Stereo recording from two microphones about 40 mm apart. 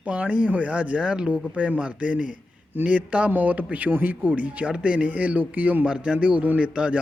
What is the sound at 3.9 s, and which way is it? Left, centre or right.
A man's voice, right.